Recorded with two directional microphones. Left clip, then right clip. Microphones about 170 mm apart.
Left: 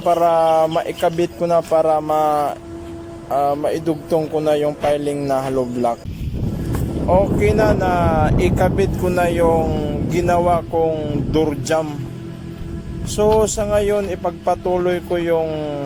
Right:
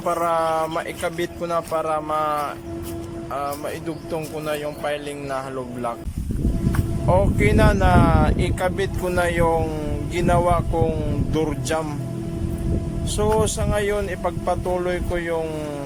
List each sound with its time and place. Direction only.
0.0 s speech: 10° left (ahead or behind)
7.1 s speech: 5° left (ahead or behind)
13.1 s speech: 5° left (ahead or behind)